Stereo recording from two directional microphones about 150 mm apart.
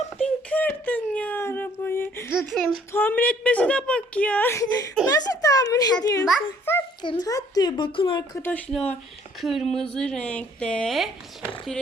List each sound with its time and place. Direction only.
0.2 s a woman's voice: 10° left (ahead or behind)
6.7 s a woman's voice: 15° left (ahead or behind)
7.0 s a woman's voice: 30° left (ahead or behind)
8.4 s a woman's voice: 10° left (ahead or behind)